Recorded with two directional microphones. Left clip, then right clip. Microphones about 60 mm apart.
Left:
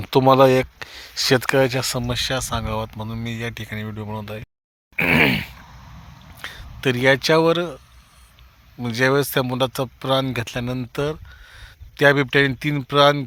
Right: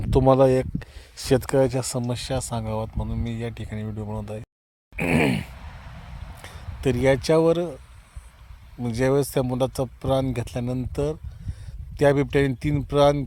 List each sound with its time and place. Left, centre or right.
0.0 s speech: right
4.9 s groan: right
6.3 s speech: right
8.8 s speech: right